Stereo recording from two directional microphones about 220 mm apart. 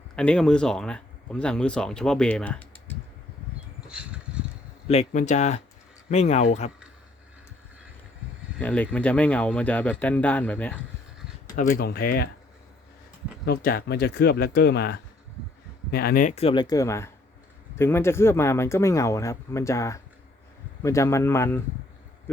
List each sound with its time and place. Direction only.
0.2 s speech: 5° left (ahead or behind)
3.8 s a sound: 5° right (ahead or behind)
4.9 s speech: 30° left (ahead or behind)
8.5 s speech: 5° left (ahead or behind)
11.5 s speech: 40° left (ahead or behind)
13.4 s speech: 45° left (ahead or behind); by 21.6 s 10° left (ahead or behind)